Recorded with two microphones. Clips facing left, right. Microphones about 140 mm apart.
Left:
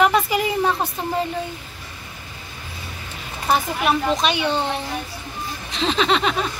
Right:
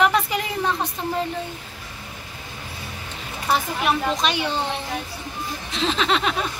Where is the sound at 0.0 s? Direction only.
5° left (ahead or behind).